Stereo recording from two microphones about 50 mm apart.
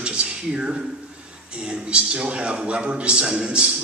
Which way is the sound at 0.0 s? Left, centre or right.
Centre.